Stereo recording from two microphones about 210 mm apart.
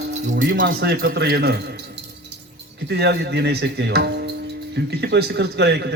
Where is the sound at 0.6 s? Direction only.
50° right (ahead or behind).